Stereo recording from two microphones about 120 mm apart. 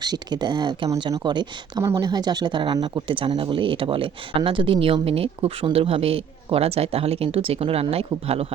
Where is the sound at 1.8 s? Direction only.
30° right (ahead or behind).